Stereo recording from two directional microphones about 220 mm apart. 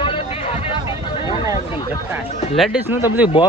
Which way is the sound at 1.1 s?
25° left (ahead or behind).